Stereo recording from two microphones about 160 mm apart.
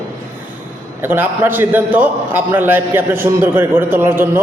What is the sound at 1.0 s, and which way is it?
A man's voice, 10° right (ahead or behind).